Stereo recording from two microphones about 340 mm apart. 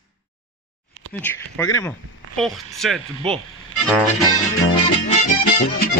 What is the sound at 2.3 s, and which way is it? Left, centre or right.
Speech, centre.